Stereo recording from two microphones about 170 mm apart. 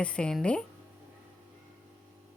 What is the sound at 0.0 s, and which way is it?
Speech, 5° left (ahead or behind).